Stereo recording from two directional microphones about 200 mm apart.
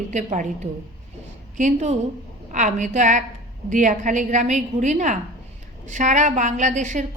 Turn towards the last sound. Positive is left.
turn(degrees=-35)  # may be behind; listen again after turning